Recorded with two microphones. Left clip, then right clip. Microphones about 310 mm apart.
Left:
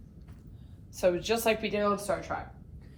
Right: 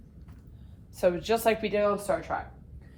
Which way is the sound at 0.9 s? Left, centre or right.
Right.